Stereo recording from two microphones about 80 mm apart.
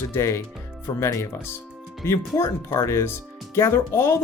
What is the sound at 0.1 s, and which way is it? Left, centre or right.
Speech, left.